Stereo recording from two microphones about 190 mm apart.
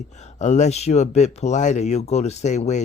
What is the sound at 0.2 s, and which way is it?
Speech, 40° left (ahead or behind).